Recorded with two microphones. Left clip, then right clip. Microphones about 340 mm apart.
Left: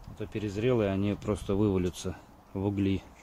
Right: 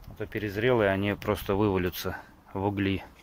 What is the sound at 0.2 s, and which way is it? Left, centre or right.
Speech, right.